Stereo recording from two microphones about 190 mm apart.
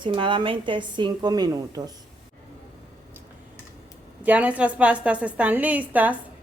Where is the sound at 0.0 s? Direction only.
25° right (ahead or behind).